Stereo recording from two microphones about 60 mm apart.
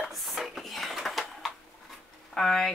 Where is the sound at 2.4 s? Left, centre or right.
Centre.